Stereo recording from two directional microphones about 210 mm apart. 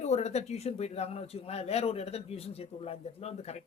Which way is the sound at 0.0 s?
30° left (ahead or behind).